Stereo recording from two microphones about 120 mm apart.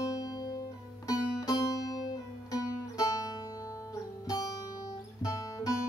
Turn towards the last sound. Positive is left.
turn(degrees=30)  # may be behind; listen again after turning